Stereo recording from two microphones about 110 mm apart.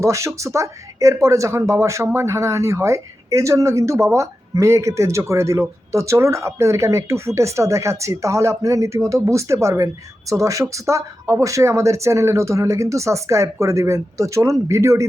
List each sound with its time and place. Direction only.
0.0 s speech: 25° right (ahead or behind)